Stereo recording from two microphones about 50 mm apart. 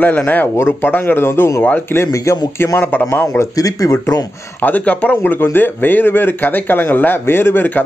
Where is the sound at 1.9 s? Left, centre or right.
Left.